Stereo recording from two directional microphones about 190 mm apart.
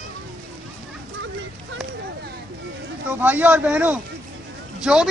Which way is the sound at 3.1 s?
10° right (ahead or behind).